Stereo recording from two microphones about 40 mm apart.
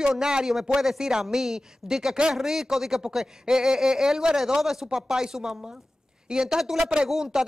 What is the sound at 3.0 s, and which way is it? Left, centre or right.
A man's voice, centre.